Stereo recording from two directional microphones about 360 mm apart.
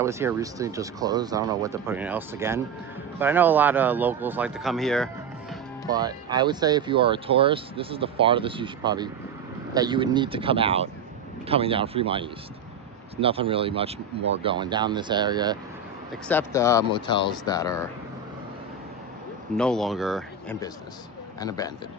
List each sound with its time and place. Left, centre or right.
0.0 s speech: centre
5.9 s speech: centre
16.3 s speech: centre
19.5 s speech: centre